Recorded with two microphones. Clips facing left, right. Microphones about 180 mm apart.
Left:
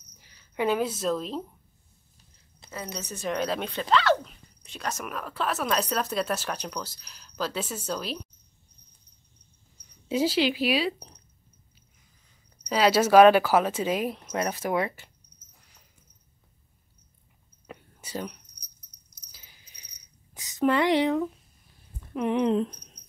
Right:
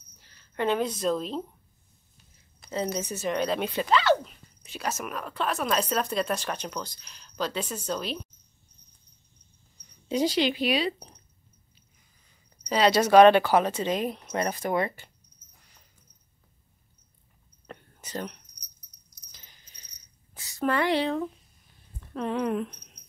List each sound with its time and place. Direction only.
0.2 s speech: 10° left (ahead or behind)
2.6 s a sound: 25° left (ahead or behind)
3.0 s speech: 10° right (ahead or behind)
3.3 s speech: centre (ahead or behind)
10.0 s speech: 5° left (ahead or behind)
12.6 s speech: 5° left (ahead or behind)
17.6 s a sound: 5° left (ahead or behind)
19.3 s cricket: 10° left (ahead or behind)
20.3 s speech: 20° left (ahead or behind)